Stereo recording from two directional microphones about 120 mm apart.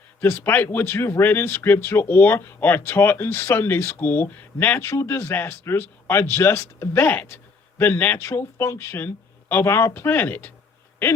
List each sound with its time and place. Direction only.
0.2 s speech: 15° left (ahead or behind)